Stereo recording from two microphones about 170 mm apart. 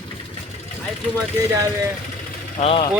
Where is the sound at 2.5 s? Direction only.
35° left (ahead or behind).